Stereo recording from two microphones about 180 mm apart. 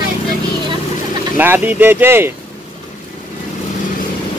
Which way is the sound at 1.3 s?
10° right (ahead or behind).